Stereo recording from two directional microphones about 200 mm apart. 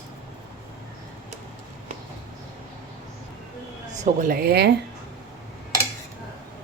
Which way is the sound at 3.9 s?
40° right (ahead or behind).